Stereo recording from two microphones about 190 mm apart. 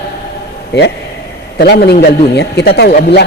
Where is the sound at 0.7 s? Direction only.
60° left (ahead or behind).